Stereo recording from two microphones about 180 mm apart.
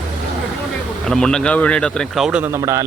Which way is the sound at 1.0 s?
5° left (ahead or behind).